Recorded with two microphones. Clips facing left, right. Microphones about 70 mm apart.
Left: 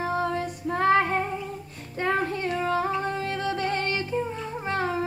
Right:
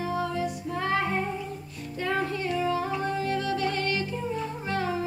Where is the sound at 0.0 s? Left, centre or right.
Left.